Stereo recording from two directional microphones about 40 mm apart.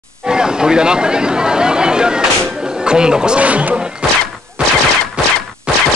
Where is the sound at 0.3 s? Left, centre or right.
Centre.